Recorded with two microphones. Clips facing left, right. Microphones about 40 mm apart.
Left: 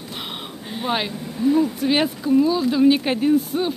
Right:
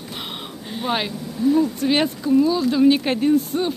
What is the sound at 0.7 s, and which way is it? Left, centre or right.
Speech, centre.